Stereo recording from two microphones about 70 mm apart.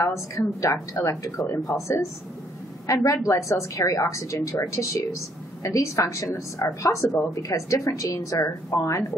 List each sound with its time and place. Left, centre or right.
0.4 s a woman's voice: left